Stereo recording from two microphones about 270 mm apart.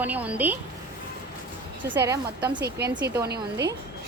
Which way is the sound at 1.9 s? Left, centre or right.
Centre.